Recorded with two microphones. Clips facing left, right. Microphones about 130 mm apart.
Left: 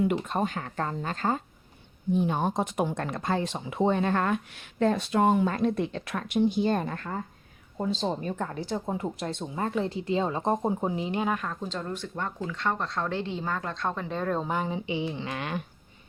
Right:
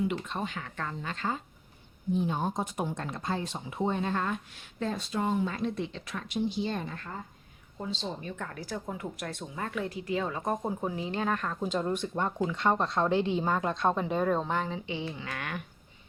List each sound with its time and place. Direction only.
0.3 s speech: 45° left (ahead or behind)
2.1 s speech: 65° left (ahead or behind); by 8.4 s 45° left (ahead or behind)
8.4 s speech: 25° left (ahead or behind); by 11.5 s 10° left (ahead or behind)
11.6 s speech: 15° right (ahead or behind)
14.3 s speech: 10° left (ahead or behind)